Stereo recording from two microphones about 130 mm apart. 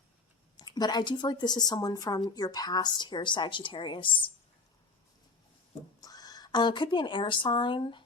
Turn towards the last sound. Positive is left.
turn(degrees=40)  # may be behind; listen again after turning